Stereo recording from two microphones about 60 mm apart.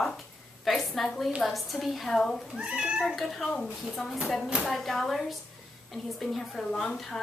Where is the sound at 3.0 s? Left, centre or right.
Centre.